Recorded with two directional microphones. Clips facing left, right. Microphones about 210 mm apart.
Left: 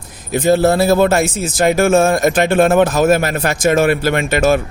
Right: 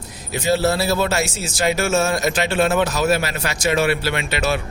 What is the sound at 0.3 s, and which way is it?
Speech, 50° left (ahead or behind).